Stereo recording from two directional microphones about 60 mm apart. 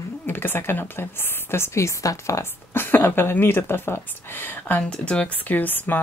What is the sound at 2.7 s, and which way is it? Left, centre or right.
A woman's voice, left.